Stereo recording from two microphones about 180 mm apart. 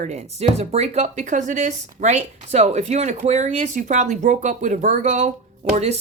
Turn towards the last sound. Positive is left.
turn(degrees=-40)  # may be behind; listen again after turning